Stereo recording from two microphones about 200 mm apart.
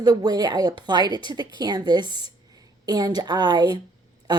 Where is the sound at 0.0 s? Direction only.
20° right (ahead or behind).